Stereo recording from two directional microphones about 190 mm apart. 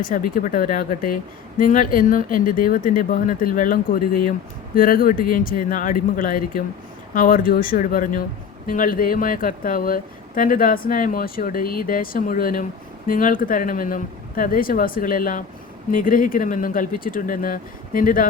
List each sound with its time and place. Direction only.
0.0 s a woman's voice: 45° left (ahead or behind)